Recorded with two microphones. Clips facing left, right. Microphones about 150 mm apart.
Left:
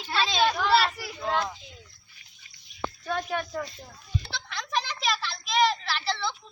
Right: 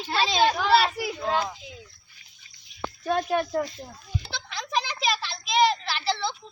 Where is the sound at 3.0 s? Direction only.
35° right (ahead or behind).